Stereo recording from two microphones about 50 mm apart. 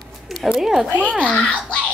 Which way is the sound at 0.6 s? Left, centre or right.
Centre.